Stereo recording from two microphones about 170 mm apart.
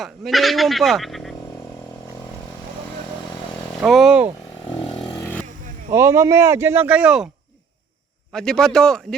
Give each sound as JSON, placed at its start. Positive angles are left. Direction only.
{"t": 0.0, "sound": "speech", "side_deg": 0}
{"t": 3.8, "sound": "a sound", "side_deg": 0}
{"t": 4.8, "sound": "vehicle", "side_deg": 30}
{"t": 5.2, "sound": "motorcycle", "side_deg": 10}
{"t": 5.9, "sound": "speech", "side_deg": -15}
{"t": 8.3, "sound": "speech", "side_deg": 5}